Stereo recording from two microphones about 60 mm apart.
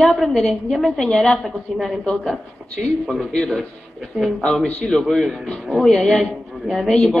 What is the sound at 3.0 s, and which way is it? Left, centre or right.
A man's voice, centre.